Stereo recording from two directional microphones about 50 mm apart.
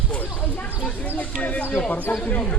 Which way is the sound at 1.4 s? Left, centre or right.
Left.